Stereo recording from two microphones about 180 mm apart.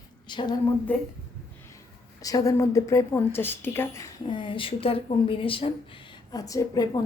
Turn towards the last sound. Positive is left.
turn(degrees=20)  # may be behind; listen again after turning